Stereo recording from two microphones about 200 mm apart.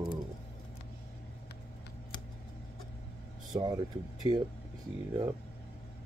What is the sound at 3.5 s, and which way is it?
Speech, 15° right (ahead or behind).